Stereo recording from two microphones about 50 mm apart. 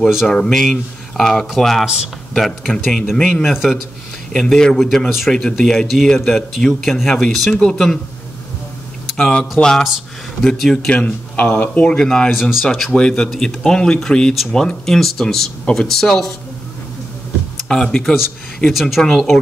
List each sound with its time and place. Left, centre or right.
0.3 s speech: centre
3.4 s speech: centre
4.3 s speech: centre
7.5 s speech: centre
9.0 s a sound: centre
9.6 s speech: centre
10.9 s speech: left
12.0 s speech: centre
12.3 s speech: centre
12.6 s speech: centre
14.3 s speech: centre
17.6 s speech: centre
18.7 s speech: centre